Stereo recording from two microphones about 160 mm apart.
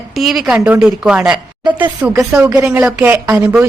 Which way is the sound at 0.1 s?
Centre (ahead or behind).